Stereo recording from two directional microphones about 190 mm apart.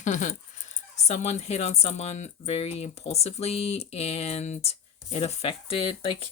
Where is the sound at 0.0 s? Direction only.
40° left (ahead or behind).